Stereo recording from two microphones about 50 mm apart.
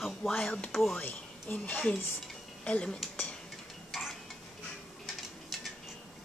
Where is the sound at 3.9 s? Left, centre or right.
Centre.